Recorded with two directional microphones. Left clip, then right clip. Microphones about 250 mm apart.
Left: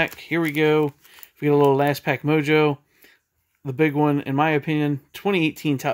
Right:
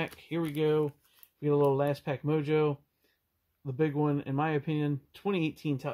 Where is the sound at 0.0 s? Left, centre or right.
Centre.